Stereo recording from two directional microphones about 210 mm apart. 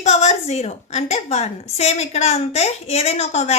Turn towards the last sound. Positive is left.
turn(degrees=30)  # may be behind; listen again after turning